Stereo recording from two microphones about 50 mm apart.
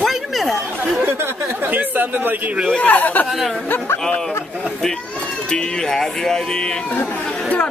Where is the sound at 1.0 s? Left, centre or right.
Right.